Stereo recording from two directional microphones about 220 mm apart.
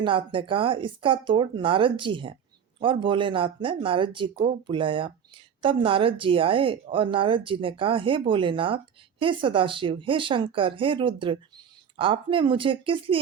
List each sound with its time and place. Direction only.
0.0 s speech: 25° right (ahead or behind)